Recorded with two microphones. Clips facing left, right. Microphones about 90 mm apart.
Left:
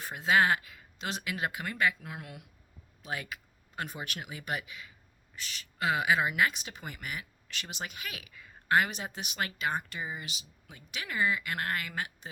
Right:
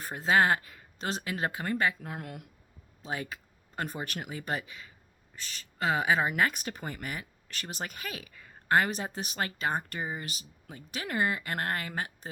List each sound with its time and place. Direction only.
0.0 s speech: 40° right (ahead or behind)
3.0 s speech: 30° right (ahead or behind)